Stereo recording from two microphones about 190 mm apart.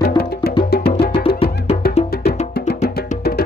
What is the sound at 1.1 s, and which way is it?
Music, 30° left (ahead or behind).